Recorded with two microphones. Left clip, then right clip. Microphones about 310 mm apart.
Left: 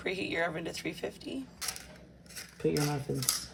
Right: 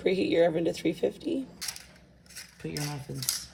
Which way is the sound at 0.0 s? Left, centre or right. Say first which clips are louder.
Right 8 dB; centre.